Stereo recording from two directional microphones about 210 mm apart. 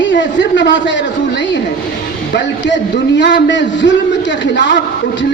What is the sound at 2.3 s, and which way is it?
A woman's voice, 55° left (ahead or behind).